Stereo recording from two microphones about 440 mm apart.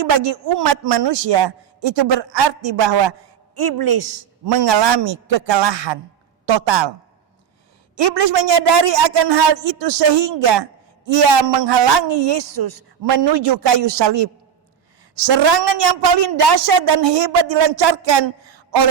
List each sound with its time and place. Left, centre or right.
0.0 s a man's voice: right
6.4 s speech: right
8.0 s a man's voice: right